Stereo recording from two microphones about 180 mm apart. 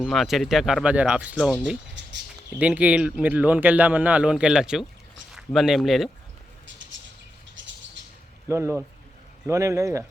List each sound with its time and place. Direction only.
0.0 s a man's voice: centre (ahead or behind)
8.4 s a man's voice: 15° right (ahead or behind)